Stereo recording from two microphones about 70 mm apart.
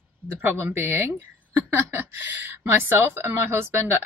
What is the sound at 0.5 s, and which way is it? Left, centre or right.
A woman's voice, right.